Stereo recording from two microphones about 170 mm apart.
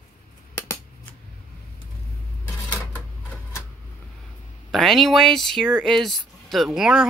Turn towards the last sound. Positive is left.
turn(degrees=-5)  # may be behind; listen again after turning